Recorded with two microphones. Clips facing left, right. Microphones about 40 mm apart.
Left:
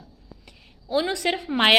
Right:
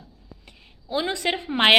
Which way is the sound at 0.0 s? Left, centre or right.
Right.